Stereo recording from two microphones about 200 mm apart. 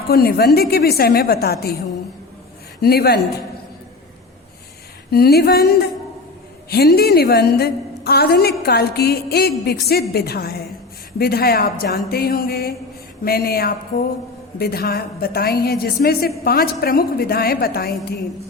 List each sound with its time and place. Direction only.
0.1 s a woman's voice: 50° left (ahead or behind)
2.8 s a woman's voice: 50° left (ahead or behind)
5.1 s a woman's voice: 50° left (ahead or behind)